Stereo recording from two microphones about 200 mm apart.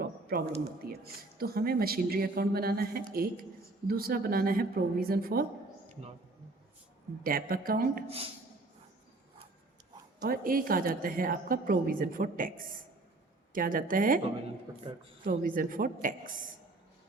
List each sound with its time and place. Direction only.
0.0 s a sound: 50° right (ahead or behind)
0.8 s a woman's voice: 50° right (ahead or behind)
6.0 s speech: 30° right (ahead or behind)
7.3 s a woman's voice: 45° right (ahead or behind)
8.0 s a woman's voice: 30° right (ahead or behind)
10.2 s a woman's voice: 50° right (ahead or behind)
14.7 s speech: 15° right (ahead or behind)
15.2 s a woman's voice: 45° right (ahead or behind)